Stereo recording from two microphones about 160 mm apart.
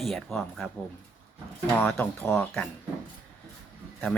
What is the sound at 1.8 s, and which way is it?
Speech, 5° left (ahead or behind).